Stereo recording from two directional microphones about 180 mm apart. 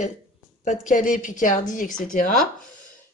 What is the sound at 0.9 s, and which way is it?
A woman's voice, 50° left (ahead or behind).